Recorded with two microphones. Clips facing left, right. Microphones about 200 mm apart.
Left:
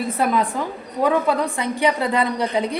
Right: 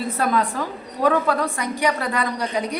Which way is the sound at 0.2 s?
20° left (ahead or behind).